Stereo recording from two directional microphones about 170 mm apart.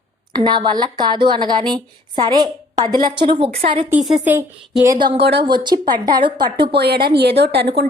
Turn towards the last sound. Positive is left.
turn(degrees=-75)  # may be behind; listen again after turning